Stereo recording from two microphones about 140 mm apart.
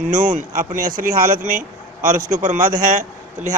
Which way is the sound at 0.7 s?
80° right.